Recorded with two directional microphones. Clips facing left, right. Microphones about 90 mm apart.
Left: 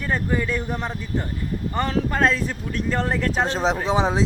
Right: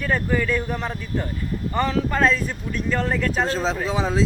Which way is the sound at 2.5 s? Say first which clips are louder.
Even; 35° left (ahead or behind).